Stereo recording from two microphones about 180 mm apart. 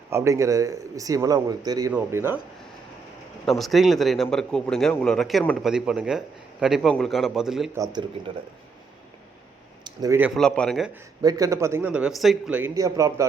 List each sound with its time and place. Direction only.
0.1 s a man's voice: 15° right (ahead or behind)
1.9 s a man's voice: 10° right (ahead or behind)
3.4 s a man's voice: centre (ahead or behind)
9.8 s a sound: 20° right (ahead or behind)
10.3 s a man's voice: 5° left (ahead or behind)
11.2 s a man's voice: 20° right (ahead or behind)
12.7 s a man's voice: 15° right (ahead or behind)